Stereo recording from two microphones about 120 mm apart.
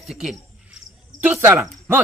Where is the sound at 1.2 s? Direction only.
20° right (ahead or behind).